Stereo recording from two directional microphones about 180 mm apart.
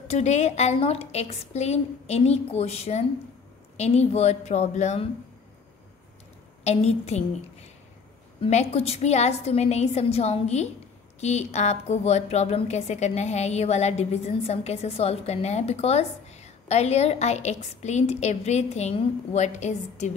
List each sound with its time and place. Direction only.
0.1 s a woman's voice: 40° left (ahead or behind)
6.6 s a woman's voice: 35° left (ahead or behind)
8.4 s a woman's voice: 35° left (ahead or behind)